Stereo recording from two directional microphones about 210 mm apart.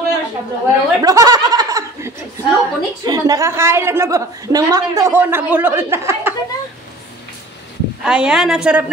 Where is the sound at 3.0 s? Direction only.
20° right (ahead or behind).